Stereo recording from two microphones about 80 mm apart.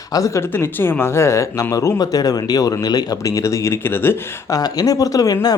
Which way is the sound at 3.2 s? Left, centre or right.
Left.